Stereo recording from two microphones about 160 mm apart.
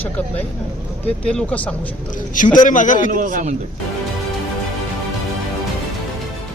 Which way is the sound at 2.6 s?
55° left (ahead or behind).